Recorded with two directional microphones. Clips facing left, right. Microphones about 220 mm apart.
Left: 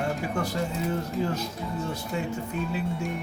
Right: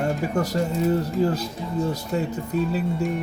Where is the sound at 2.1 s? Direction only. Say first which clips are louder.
Right 5 dB; 40° right (ahead or behind).